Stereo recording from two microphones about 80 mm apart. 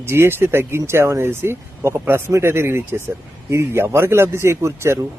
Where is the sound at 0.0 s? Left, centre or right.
Right.